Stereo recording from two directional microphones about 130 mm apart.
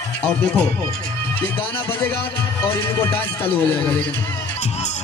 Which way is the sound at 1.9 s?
15° left (ahead or behind).